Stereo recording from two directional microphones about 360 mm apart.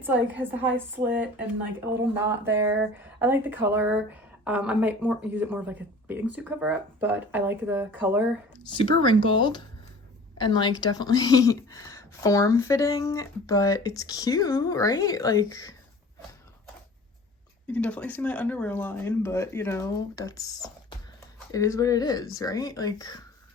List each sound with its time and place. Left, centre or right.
0.3 s speech: centre
8.7 s speech: centre
17.7 s speech: centre